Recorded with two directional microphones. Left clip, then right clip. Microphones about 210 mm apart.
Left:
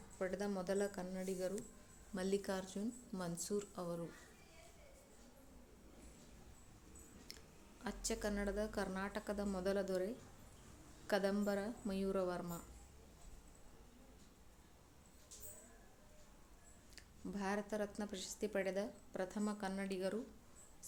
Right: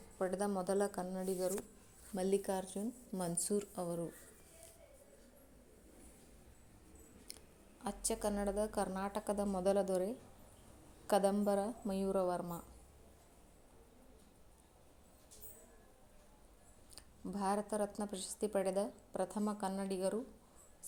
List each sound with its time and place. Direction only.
0.2 s a woman's voice: 15° right (ahead or behind)
3.2 s speech: 20° right (ahead or behind)
7.3 s a sound: 15° right (ahead or behind)
7.9 s a woman's voice: 10° right (ahead or behind)
16.9 s a woman's voice: 15° right (ahead or behind)